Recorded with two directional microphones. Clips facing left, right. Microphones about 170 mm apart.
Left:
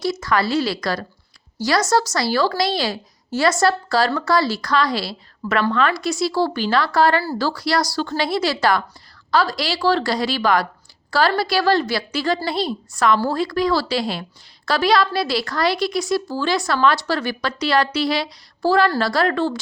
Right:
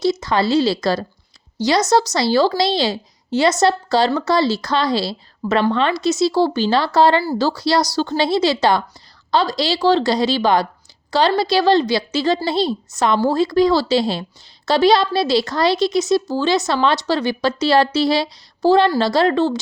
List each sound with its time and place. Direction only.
0.0 s a woman's voice: 25° right (ahead or behind)